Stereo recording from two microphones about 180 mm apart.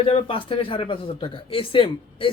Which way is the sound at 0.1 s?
30° left (ahead or behind).